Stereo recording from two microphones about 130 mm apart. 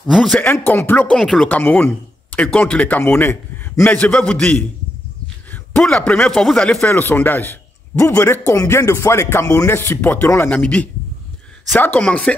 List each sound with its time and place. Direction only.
0.0 s speech: 5° right (ahead or behind)
0.3 s a man's voice: 15° left (ahead or behind)
1.1 s speech: 5° left (ahead or behind)
1.6 s a man's voice: 15° left (ahead or behind)
5.5 s a sound: 5° left (ahead or behind)
6.2 s a man's voice: 5° left (ahead or behind)